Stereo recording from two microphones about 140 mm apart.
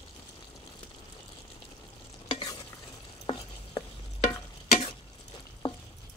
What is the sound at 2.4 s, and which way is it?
Stir, 25° left (ahead or behind).